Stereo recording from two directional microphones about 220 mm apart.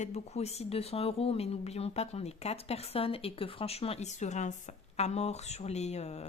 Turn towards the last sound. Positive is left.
turn(degrees=30)  # may be behind; listen again after turning